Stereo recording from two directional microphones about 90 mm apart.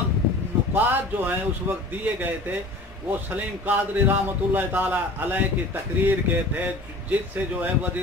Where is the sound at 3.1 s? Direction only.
20° right (ahead or behind).